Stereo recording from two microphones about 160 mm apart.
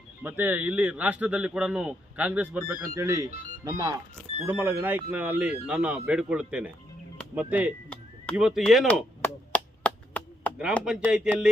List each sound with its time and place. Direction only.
0.2 s a man's voice: 10° right (ahead or behind)
2.9 s a man's voice: 20° right (ahead or behind); by 8.8 s centre (ahead or behind)
9.2 s chop: 10° left (ahead or behind)
10.9 s speech: 5° right (ahead or behind)